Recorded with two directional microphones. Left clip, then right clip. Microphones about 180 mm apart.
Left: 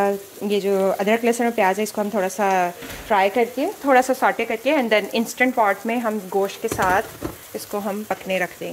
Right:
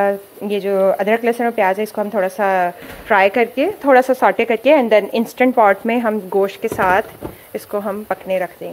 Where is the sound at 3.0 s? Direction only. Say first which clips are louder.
Right 5 dB; centre (ahead or behind).